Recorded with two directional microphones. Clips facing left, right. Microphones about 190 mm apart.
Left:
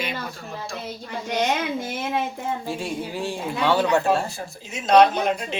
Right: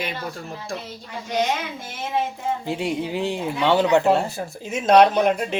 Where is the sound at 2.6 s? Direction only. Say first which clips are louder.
Right 4 dB; 20° right (ahead or behind).